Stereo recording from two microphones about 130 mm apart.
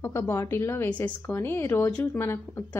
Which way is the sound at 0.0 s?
20° left (ahead or behind).